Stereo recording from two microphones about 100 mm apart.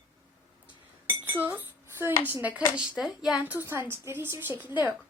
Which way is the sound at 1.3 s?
20° right (ahead or behind).